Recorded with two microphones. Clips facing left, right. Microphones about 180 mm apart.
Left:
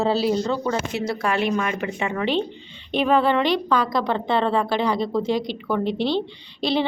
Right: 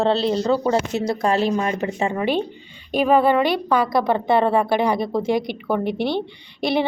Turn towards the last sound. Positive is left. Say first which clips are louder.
# right 2 dB
turn(degrees=-15)  # may be behind; listen again after turning